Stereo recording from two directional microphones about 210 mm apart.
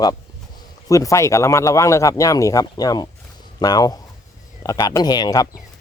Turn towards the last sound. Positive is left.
turn(degrees=20)  # may be behind; listen again after turning